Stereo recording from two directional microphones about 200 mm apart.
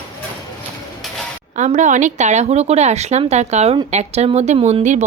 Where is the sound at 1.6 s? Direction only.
35° right (ahead or behind).